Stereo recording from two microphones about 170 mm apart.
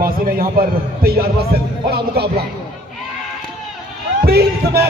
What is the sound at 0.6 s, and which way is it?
Speech, 60° right (ahead or behind).